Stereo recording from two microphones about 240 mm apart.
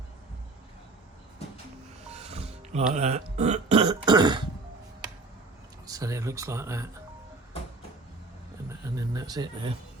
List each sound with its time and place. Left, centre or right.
2.0 s music: right
5.9 s speech: centre
9.0 s speech: centre